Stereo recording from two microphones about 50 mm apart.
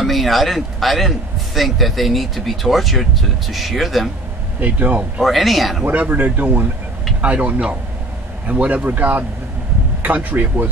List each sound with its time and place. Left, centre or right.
0.0 s a man's voice: centre
4.6 s speech: right
5.2 s a man's voice: centre
5.9 s speech: right